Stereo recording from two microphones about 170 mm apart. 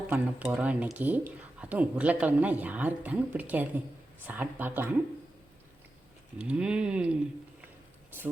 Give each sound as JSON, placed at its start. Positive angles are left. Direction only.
{"t": 0.1, "sound": "speech", "side_deg": -10}
{"t": 6.4, "sound": "speech", "side_deg": -5}